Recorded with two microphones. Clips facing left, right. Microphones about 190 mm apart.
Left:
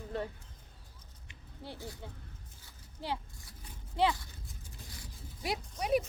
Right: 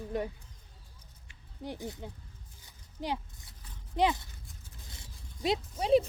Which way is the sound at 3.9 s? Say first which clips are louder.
Right 2 dB; 20° right (ahead or behind).